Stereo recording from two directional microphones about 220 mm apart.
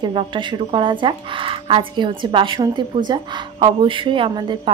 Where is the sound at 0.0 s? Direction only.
20° right (ahead or behind).